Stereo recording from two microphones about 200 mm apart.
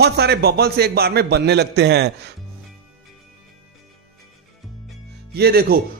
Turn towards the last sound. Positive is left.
turn(degrees=-50)  # may be behind; listen again after turning